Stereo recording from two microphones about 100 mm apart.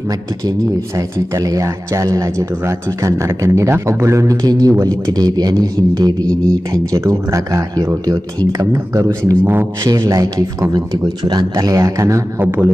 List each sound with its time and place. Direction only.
0.9 s speech: 35° right (ahead or behind)
9.8 s speech: 35° right (ahead or behind)